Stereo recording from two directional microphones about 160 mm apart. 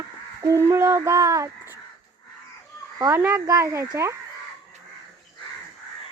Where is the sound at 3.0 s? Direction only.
15° right (ahead or behind).